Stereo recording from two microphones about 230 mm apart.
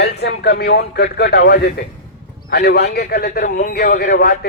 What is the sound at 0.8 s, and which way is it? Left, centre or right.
A man's voice, left.